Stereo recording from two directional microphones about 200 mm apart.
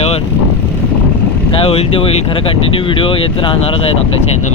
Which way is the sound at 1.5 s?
30° left (ahead or behind).